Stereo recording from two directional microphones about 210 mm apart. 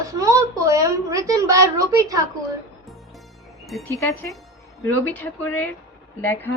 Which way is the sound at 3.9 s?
15° left (ahead or behind).